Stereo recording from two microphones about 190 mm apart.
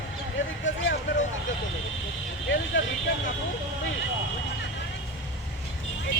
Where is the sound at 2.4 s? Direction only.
70° left (ahead or behind).